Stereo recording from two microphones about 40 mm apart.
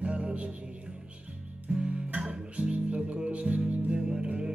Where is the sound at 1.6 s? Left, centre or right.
Right.